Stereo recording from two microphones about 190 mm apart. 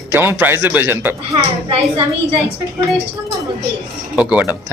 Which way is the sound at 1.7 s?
30° right (ahead or behind).